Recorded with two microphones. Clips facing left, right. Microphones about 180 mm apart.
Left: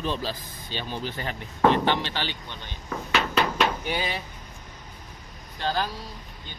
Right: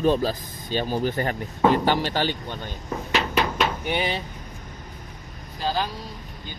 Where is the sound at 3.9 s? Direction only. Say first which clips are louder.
Right 4 dB; 25° right (ahead or behind).